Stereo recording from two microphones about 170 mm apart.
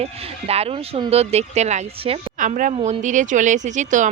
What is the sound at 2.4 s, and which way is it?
Speech, 50° right (ahead or behind).